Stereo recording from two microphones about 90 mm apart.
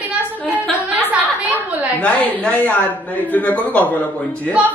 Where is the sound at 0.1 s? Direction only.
15° right (ahead or behind).